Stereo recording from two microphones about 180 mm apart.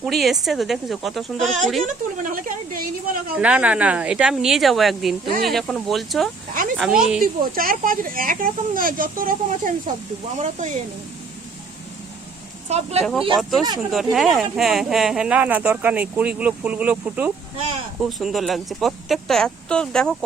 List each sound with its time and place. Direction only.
0.0 s speech: centre (ahead or behind)
1.8 s speech: 50° right (ahead or behind)
3.3 s speech: 5° right (ahead or behind)
7.5 s speech: 50° right (ahead or behind)
12.6 s speech: 35° right (ahead or behind)
13.3 s speech: centre (ahead or behind)